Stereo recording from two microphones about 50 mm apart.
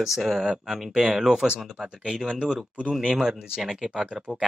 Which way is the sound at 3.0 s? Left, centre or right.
Centre.